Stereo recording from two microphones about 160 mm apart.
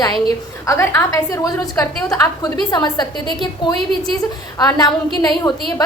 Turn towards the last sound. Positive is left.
turn(degrees=25)  # may be behind; listen again after turning